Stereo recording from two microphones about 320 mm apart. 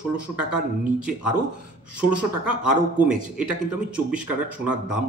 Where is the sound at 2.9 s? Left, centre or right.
Centre.